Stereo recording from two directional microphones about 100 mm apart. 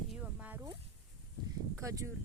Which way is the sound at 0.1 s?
10° right (ahead or behind).